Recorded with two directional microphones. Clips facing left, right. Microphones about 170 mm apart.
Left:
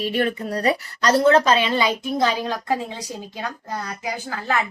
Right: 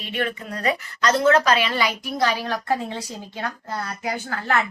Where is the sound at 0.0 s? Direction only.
40° left (ahead or behind).